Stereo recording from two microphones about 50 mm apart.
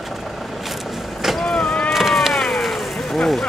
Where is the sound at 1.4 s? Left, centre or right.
Centre.